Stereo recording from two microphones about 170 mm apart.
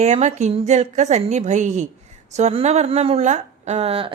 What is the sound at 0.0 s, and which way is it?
A woman's voice, 40° right (ahead or behind).